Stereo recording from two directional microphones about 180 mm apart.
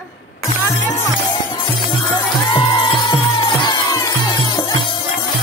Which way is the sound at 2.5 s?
25° left (ahead or behind).